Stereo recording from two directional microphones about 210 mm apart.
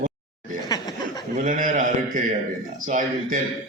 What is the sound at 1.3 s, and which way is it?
Speech, 40° right (ahead or behind).